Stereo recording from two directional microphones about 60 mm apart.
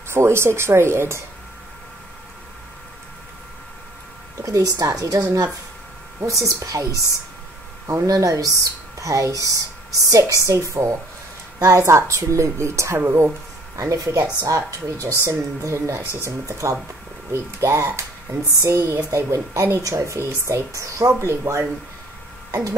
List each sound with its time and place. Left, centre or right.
0.1 s a woman's voice: right
4.4 s a woman's voice: right
6.2 s speech: right
6.6 s a woman's voice: right
14.2 s a woman's voice: right
14.9 s a woman's voice: right
21.2 s a woman's voice: right